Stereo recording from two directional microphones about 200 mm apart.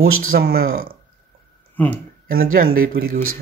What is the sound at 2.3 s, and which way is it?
Speech, 50° right (ahead or behind).